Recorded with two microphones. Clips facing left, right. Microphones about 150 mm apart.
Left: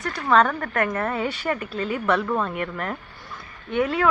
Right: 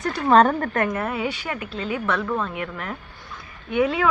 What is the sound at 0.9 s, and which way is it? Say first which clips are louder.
A woman's voice: even; 10° right (ahead or behind).